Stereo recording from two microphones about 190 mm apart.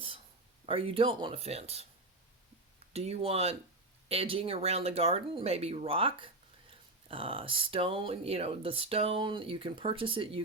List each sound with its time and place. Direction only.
0.6 s speech: 30° right (ahead or behind)
2.9 s speech: 35° right (ahead or behind)